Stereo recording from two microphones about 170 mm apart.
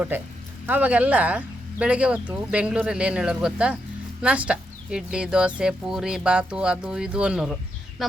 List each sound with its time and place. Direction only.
0.7 s speech: 10° right (ahead or behind)